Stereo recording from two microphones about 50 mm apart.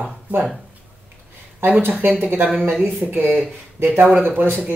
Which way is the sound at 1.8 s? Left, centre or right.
Right.